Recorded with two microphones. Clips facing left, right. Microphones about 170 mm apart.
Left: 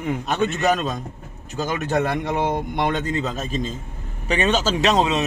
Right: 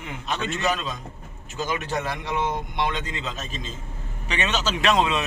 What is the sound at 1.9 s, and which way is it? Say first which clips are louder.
Speech: left 8 dB; 55° left (ahead or behind).